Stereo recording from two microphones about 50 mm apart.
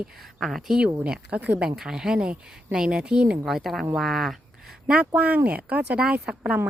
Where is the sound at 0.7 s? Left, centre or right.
Right.